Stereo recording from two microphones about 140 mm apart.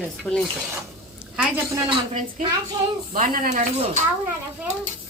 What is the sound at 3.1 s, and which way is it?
Speech, 80° right.